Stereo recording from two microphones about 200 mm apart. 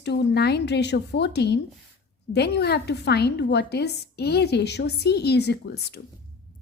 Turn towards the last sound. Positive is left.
turn(degrees=55)  # may be behind; listen again after turning